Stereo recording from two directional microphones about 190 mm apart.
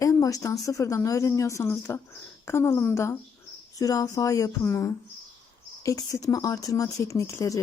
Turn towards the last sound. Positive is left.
turn(degrees=15)  # may be behind; listen again after turning